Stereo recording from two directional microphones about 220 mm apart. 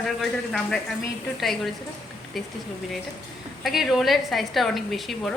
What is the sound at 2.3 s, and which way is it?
Speech, centre (ahead or behind).